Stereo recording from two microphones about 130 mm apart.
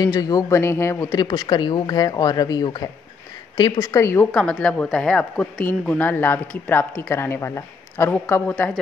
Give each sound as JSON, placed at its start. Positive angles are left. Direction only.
{"t": 0.0, "sound": "speech", "side_deg": 30}
{"t": 1.1, "sound": "speech", "side_deg": 30}
{"t": 4.3, "sound": "speech", "side_deg": 5}